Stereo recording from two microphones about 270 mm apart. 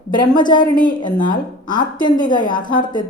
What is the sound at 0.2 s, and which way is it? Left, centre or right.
A woman's voice, centre.